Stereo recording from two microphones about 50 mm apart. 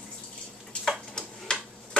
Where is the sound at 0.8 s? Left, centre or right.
Centre.